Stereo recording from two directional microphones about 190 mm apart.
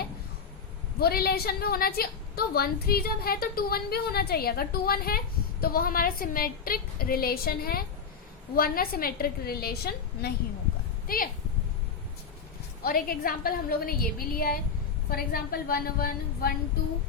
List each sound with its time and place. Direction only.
0.9 s a woman's voice: 55° left (ahead or behind)
12.8 s a woman's voice: 50° left (ahead or behind)